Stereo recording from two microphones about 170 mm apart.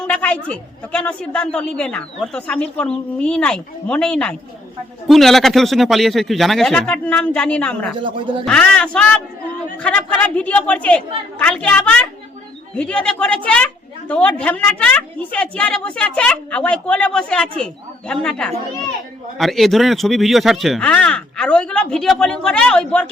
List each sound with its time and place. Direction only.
0.1 s a man's voice: 5° left (ahead or behind)
8.0 s speech: 30° right (ahead or behind)
8.4 s a man's voice: 5° left (ahead or behind)